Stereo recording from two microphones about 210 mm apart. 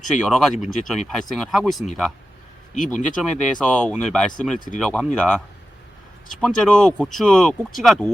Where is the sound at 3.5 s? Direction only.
5° left (ahead or behind).